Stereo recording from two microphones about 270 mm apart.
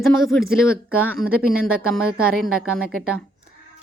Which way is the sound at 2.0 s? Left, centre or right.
Right.